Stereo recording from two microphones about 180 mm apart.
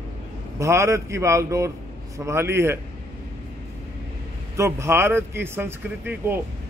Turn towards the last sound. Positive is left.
turn(degrees=-10)  # may be behind; listen again after turning